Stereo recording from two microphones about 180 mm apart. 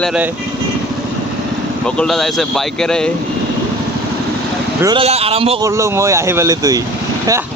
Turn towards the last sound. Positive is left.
turn(degrees=-20)  # may be behind; listen again after turning